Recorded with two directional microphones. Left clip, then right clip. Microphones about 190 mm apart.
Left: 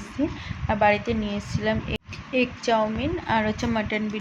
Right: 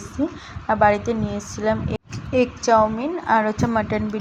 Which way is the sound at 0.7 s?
15° right (ahead or behind).